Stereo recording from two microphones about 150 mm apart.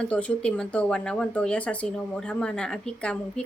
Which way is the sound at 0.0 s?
10° left (ahead or behind).